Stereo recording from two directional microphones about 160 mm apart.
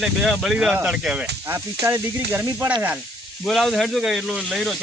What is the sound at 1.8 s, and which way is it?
Sizzle, 15° right (ahead or behind).